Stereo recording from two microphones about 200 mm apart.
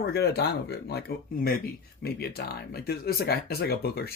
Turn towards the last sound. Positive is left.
turn(degrees=50)  # may be behind; listen again after turning